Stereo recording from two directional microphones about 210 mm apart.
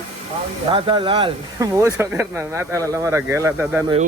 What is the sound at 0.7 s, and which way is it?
Speech, 25° right (ahead or behind).